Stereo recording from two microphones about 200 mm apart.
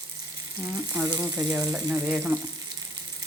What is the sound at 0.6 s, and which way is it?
Speech, 15° right (ahead or behind).